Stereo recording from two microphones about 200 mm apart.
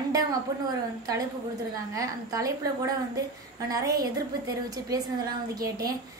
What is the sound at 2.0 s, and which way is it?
A woman's voice, 15° right (ahead or behind).